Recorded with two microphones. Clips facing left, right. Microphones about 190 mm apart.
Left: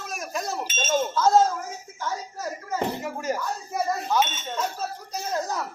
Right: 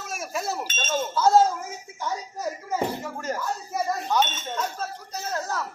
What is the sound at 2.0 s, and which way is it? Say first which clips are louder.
Speech: right 1 dB; 15° right (ahead or behind).